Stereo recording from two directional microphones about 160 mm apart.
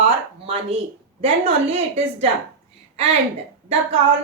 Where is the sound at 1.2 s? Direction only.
40° right (ahead or behind).